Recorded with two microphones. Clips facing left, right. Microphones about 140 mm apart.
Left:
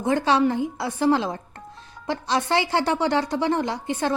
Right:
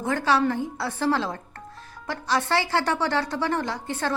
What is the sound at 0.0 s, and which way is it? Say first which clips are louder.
A woman's voice: left 3 dB; 20° left (ahead or behind).